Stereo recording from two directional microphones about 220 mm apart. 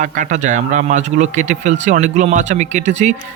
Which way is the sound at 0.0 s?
35° right (ahead or behind).